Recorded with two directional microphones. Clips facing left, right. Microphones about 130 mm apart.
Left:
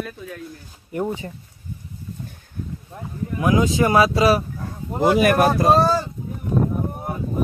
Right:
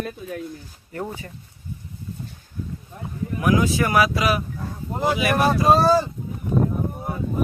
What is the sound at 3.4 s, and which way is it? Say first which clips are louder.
Speech: left 2 dB; 25° left (ahead or behind).